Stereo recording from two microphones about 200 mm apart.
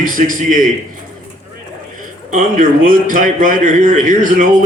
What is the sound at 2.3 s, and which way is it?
A man's voice, 40° right (ahead or behind).